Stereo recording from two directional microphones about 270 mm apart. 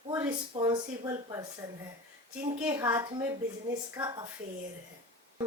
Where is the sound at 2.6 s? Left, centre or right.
Centre.